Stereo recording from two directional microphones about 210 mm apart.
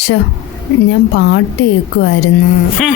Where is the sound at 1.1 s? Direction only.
60° left (ahead or behind).